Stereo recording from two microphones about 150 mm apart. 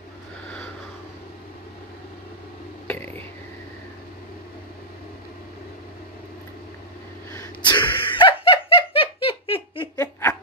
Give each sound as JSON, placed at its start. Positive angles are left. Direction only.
{"t": 2.9, "sound": "whispering", "side_deg": 15}
{"t": 7.6, "sound": "laughter", "side_deg": 30}